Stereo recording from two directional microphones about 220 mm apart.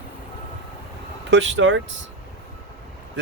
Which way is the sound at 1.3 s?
55° right (ahead or behind).